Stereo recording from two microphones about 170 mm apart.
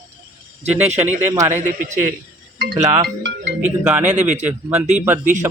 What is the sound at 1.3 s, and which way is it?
Speech, 15° right (ahead or behind).